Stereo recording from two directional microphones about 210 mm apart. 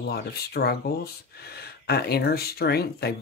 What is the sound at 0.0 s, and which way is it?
Speech, 50° left (ahead or behind).